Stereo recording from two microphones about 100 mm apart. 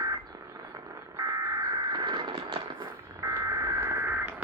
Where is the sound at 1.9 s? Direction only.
50° right (ahead or behind).